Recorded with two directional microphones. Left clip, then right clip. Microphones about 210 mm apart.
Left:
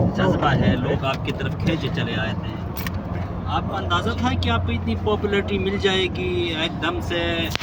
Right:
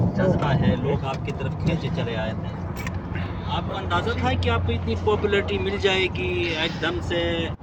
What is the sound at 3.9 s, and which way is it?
Speech, 50° left (ahead or behind).